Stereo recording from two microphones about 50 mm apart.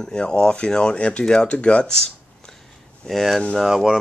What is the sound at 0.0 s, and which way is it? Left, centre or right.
Speech, centre.